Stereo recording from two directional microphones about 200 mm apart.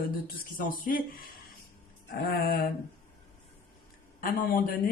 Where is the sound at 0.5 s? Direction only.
45° left (ahead or behind).